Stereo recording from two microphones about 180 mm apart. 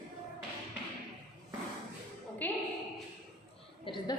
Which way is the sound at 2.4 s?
10° left (ahead or behind).